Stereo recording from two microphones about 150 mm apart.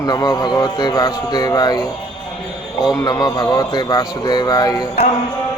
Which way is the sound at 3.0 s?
25° left (ahead or behind).